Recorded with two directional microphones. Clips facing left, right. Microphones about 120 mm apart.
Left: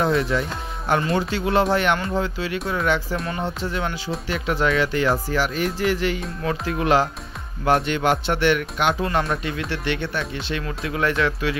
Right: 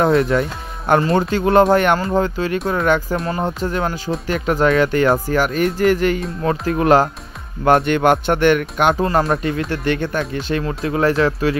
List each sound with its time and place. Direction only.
0.0 s speech: 55° right (ahead or behind); by 11.5 s 35° right (ahead or behind)